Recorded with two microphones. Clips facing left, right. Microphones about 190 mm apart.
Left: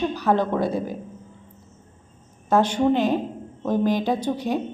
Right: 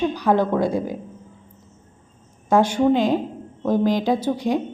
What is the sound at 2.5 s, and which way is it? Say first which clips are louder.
A woman's voice: right 2 dB; 10° right (ahead or behind).